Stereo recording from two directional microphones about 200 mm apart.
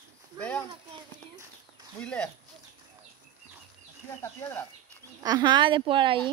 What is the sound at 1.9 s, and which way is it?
Speech, 5° left (ahead or behind).